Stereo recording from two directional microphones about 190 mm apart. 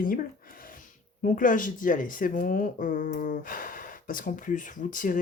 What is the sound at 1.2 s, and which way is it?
Speech, 45° left (ahead or behind).